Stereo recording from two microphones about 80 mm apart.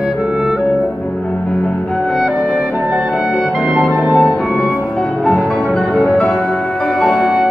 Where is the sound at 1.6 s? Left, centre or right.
Centre.